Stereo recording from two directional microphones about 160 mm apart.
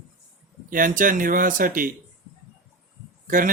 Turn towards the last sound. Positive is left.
turn(degrees=-60)  # may be behind; listen again after turning